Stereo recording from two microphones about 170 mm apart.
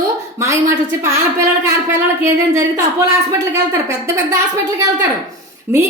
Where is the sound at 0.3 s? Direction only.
15° right (ahead or behind).